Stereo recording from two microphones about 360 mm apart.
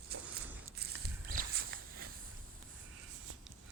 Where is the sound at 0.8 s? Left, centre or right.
Right.